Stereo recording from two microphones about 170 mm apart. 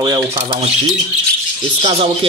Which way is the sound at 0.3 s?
35° right (ahead or behind).